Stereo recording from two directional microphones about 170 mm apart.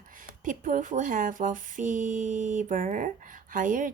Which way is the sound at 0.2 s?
50° right (ahead or behind).